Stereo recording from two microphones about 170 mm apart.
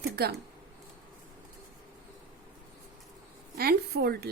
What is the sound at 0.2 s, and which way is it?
Speech, 70° right (ahead or behind).